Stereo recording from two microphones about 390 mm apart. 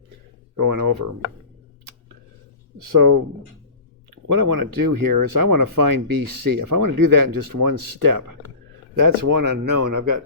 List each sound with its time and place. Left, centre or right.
0.5 s speech: right
3.0 s speech: right